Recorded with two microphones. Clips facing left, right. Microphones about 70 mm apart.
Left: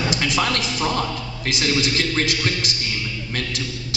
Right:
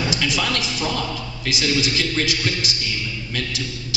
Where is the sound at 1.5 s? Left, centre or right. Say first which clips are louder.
Even; left.